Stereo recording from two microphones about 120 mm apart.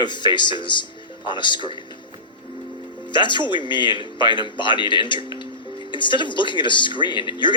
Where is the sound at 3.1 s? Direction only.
40° left (ahead or behind).